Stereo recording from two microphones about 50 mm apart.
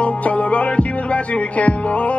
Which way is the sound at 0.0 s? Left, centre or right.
Left.